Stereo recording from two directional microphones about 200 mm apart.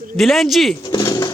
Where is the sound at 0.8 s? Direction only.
20° left (ahead or behind).